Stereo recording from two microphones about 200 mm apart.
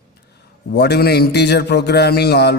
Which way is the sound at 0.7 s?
55° left (ahead or behind).